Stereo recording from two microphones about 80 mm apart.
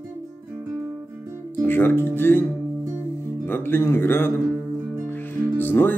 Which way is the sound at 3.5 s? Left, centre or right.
Left.